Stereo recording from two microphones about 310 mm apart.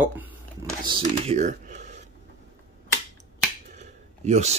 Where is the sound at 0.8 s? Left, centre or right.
Centre.